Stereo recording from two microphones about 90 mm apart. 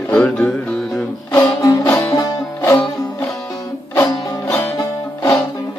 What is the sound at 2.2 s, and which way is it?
Music, 45° left (ahead or behind).